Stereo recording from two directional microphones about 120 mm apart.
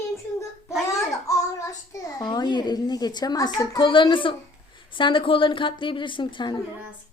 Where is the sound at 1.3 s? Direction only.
25° left (ahead or behind).